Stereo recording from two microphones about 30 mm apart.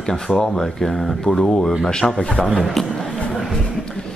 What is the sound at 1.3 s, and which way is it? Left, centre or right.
A man's voice, left.